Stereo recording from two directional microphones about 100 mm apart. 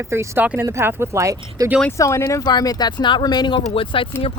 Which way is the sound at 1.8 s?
30° left (ahead or behind).